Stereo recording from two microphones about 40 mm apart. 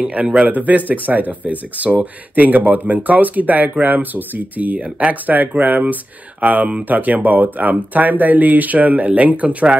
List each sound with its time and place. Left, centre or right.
0.1 s speech: right
4.7 s speech: right
5.2 s speech: right